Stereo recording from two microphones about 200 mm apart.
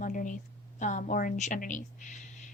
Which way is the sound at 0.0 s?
40° left (ahead or behind).